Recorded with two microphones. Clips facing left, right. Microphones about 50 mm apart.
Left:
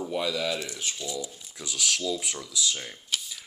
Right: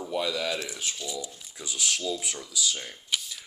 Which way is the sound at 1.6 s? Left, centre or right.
Centre.